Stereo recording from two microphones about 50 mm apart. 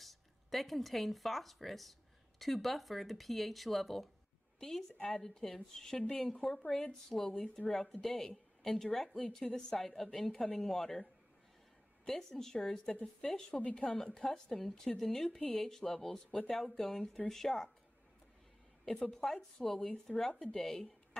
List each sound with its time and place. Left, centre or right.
0.0 s a woman's voice: centre
5.9 s speech: left
6.4 s a woman's voice: centre
16.3 s a woman's voice: centre
16.6 s a woman's voice: centre
19.1 s a woman's voice: centre